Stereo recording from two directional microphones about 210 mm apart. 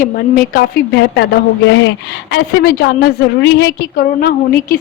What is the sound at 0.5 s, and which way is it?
A woman's voice, 50° left (ahead or behind).